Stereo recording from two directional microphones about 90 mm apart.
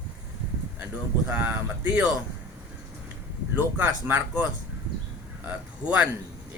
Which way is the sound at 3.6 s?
15° right (ahead or behind).